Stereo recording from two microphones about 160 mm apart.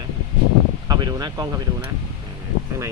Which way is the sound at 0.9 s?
25° right (ahead or behind).